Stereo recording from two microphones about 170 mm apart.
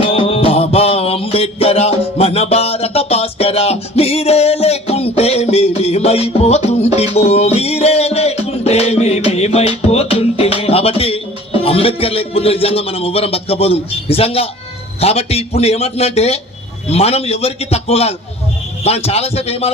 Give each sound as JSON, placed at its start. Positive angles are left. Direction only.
{"t": 0.0, "sound": "mantra", "side_deg": 35}
{"t": 15.0, "sound": "a man's voice", "side_deg": 35}